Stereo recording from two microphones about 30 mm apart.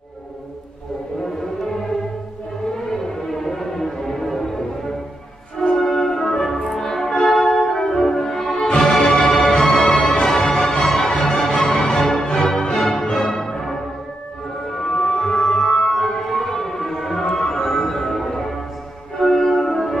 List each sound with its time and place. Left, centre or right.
2.9 s music: centre
5.8 s music: centre
10.2 s music: centre
15.9 s music: centre
16.2 s civil defense siren: centre
19.1 s music: centre